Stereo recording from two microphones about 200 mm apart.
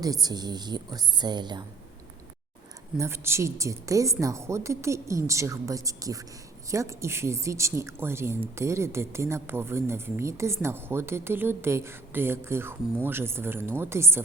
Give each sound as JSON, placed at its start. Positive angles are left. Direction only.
{"t": 0.0, "sound": "a woman's voice", "side_deg": -20}
{"t": 3.0, "sound": "speech", "side_deg": -15}